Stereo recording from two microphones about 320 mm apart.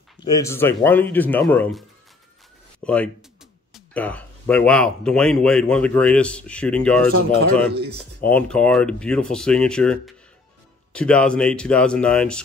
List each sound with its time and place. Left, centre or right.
0.2 s speech: centre
7.7 s speech: right
8.2 s speech: centre